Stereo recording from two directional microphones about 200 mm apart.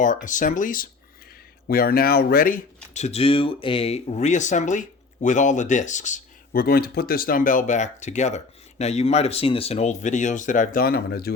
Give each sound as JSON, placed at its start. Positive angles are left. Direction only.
{"t": 0.0, "sound": "speech", "side_deg": 40}